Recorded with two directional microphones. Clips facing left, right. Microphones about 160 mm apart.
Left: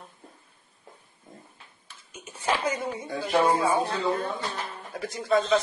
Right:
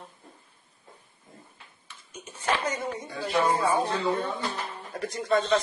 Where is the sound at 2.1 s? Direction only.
10° left (ahead or behind).